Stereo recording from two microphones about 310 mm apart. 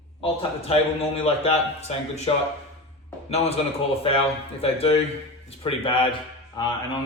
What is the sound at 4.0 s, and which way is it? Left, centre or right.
A man's voice, centre.